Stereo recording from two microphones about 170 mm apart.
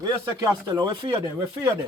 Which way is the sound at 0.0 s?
25° right (ahead or behind).